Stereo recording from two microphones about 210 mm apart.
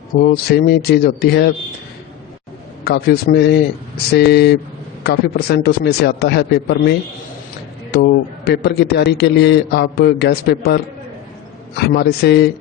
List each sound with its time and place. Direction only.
0.2 s a man's voice: 50° left (ahead or behind)
2.8 s a man's voice: 55° left (ahead or behind)
11.8 s a man's voice: 50° left (ahead or behind)